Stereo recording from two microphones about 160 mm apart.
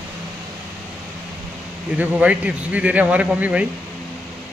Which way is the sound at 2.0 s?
10° right (ahead or behind).